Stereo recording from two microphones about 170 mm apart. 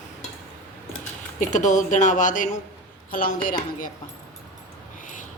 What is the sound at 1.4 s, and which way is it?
A woman's voice, 45° left (ahead or behind).